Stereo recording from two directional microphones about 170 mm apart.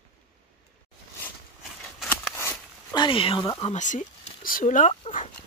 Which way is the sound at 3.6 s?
45° left (ahead or behind).